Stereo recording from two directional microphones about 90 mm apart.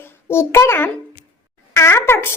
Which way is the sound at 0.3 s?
30° left (ahead or behind).